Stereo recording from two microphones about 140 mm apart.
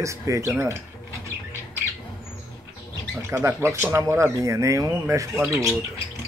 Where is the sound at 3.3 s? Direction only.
20° right (ahead or behind).